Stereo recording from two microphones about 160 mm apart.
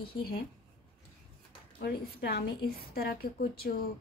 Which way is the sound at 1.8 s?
75° left (ahead or behind).